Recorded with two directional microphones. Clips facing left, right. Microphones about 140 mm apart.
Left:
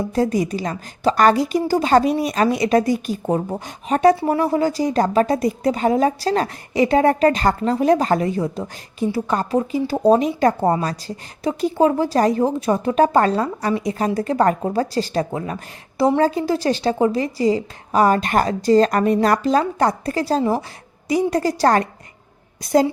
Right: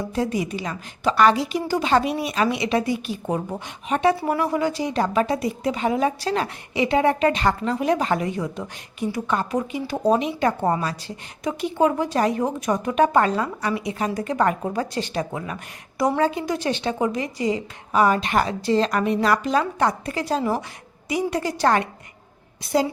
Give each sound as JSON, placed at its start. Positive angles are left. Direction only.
{"t": 0.0, "sound": "a woman's voice", "side_deg": 40}